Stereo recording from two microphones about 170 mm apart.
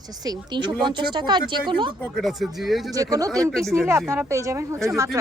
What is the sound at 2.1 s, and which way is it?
Speech, centre (ahead or behind).